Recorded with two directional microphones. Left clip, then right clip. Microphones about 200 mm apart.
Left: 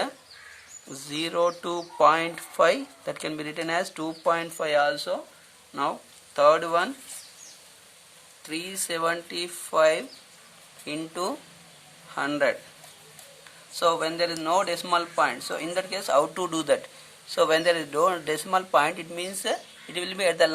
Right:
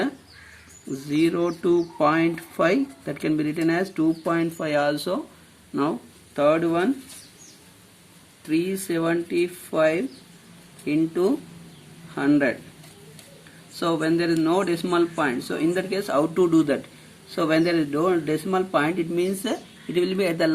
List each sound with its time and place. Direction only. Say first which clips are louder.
1.3 s speech: right 3 dB; 25° left (ahead or behind); by 5.2 s centre (ahead or behind)
5.7 s speech: right 2 dB; 10° left (ahead or behind)
6.3 s speech: left 1 dB; 25° left (ahead or behind)
8.4 s speech: right 7 dB; 20° left (ahead or behind)
13.7 s speech: right 1 dB; 20° left (ahead or behind)